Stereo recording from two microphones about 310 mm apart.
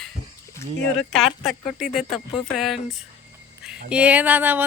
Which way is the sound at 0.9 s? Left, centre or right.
Centre.